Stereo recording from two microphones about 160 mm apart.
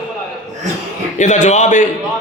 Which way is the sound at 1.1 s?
50° left (ahead or behind).